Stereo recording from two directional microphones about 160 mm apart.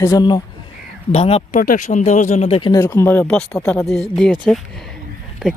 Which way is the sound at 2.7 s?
15° left (ahead or behind).